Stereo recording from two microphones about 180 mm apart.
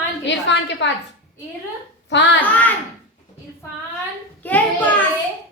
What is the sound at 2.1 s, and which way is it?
Speech, 85° left.